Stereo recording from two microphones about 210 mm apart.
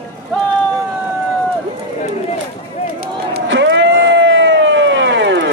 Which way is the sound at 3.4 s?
60° right (ahead or behind).